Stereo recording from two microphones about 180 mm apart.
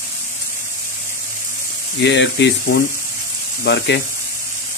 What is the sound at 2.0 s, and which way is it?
Speech, 75° left (ahead or behind).